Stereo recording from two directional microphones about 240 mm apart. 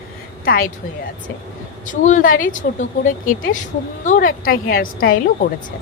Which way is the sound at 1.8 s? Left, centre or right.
Left.